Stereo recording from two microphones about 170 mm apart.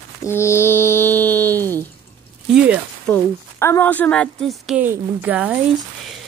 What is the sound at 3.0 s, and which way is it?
A woman's voice, 15° left (ahead or behind).